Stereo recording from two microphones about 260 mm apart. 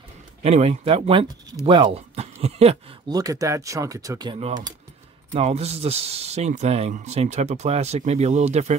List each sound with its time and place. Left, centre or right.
0.4 s speech: right